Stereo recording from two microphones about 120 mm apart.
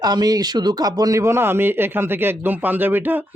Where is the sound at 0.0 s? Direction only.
35° right (ahead or behind).